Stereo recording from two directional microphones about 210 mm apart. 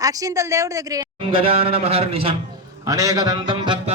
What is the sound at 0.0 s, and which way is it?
Speech, 15° right (ahead or behind).